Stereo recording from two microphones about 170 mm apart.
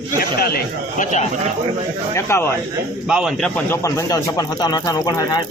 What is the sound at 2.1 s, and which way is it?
Speech, 15° left (ahead or behind).